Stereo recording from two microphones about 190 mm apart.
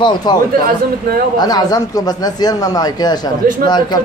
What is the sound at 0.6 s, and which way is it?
Speech, 50° right (ahead or behind).